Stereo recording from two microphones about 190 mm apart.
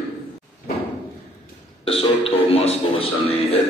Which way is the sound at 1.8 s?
30° left (ahead or behind).